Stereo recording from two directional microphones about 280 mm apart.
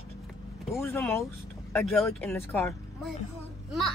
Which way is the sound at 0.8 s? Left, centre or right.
Centre.